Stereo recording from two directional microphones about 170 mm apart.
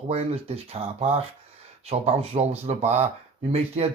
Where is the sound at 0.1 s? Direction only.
35° right (ahead or behind).